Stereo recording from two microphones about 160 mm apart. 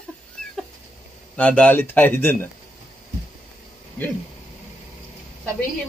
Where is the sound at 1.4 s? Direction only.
10° left (ahead or behind).